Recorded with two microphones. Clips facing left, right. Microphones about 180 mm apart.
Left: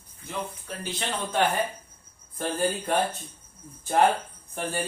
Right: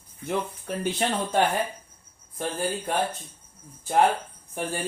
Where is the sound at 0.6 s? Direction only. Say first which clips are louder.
Right 7 dB; 55° right (ahead or behind).